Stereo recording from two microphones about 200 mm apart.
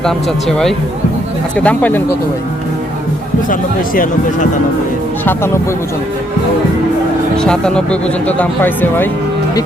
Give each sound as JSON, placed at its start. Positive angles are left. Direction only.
{"t": 0.0, "sound": "speech", "side_deg": 0}
{"t": 3.5, "sound": "speech", "side_deg": 45}
{"t": 5.2, "sound": "speech", "side_deg": 10}
{"t": 7.3, "sound": "speech", "side_deg": 5}